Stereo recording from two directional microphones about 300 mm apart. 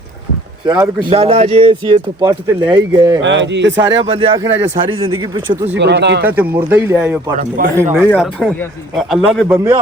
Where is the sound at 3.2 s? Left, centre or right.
Right.